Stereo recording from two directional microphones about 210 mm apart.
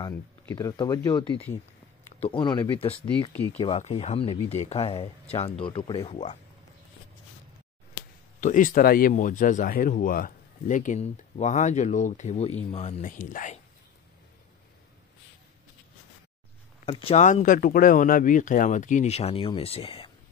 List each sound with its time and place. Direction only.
0.6 s speech: 20° left (ahead or behind)
2.0 s speech: 30° left (ahead or behind)
8.4 s speech: 35° left (ahead or behind)
16.8 s speech: 25° left (ahead or behind)